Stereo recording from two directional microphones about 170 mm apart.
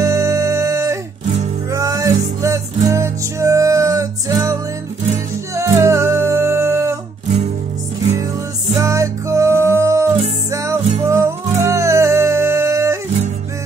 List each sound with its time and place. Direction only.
0.0 s music: 20° right (ahead or behind)
5.6 s music: 15° right (ahead or behind)
8.7 s music: 20° right (ahead or behind)